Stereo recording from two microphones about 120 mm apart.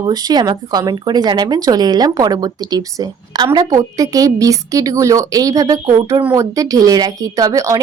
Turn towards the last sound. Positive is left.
turn(degrees=-30)  # may be behind; listen again after turning